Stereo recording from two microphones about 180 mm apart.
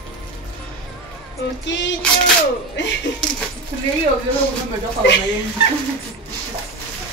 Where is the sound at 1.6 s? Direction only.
90° left.